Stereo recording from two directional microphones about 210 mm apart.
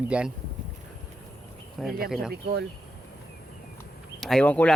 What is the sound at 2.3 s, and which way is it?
Speech, 50° right (ahead or behind).